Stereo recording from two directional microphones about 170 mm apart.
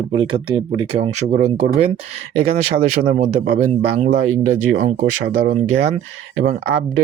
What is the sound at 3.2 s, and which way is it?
Speech, 40° right (ahead or behind).